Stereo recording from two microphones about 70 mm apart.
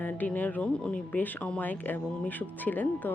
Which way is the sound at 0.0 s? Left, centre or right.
Left.